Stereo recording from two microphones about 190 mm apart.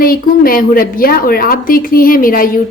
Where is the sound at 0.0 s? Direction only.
50° left (ahead or behind).